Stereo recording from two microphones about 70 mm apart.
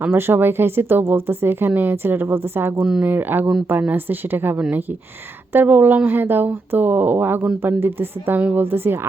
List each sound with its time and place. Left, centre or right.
0.0 s speech: right
2.8 s speech: centre
3.1 s speech: right